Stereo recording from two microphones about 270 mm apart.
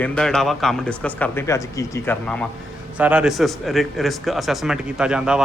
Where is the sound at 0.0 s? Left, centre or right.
Centre.